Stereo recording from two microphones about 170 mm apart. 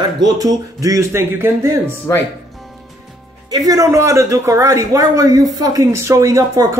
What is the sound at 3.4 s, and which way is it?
Speech, 20° right (ahead or behind).